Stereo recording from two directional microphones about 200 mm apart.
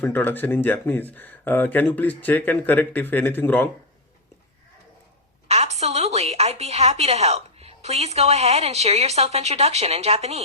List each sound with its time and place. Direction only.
0.0 s speech: 10° left (ahead or behind)
5.5 s a woman's voice: 35° right (ahead or behind)